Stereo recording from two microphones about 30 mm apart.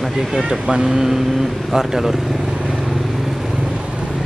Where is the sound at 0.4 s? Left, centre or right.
Right.